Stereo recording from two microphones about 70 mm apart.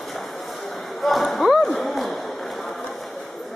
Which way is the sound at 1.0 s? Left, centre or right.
Centre.